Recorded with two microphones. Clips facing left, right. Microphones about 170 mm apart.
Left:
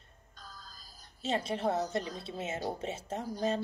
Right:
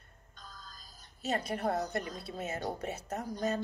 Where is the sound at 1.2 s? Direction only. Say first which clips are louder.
Left 1 dB; 25° left (ahead or behind).